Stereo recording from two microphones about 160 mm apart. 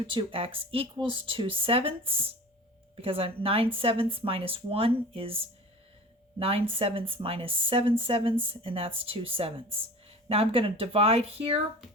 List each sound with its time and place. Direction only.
0.1 s speech: 30° right (ahead or behind)